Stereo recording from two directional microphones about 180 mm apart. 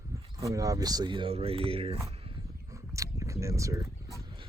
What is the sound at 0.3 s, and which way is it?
Speech, 20° right (ahead or behind).